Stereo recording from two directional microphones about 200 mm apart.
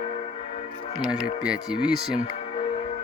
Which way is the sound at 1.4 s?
5° right (ahead or behind).